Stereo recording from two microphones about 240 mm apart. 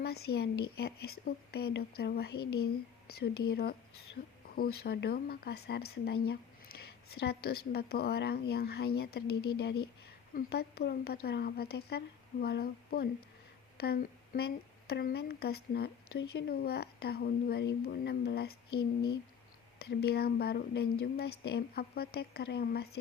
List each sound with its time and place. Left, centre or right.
0.0 s a woman's voice: left
19.8 s a woman's voice: left